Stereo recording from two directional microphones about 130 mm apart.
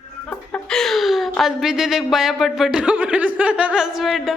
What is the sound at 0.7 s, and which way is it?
Speech, 5° left (ahead or behind).